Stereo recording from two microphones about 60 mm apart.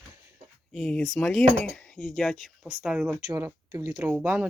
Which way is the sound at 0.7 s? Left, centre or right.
Centre.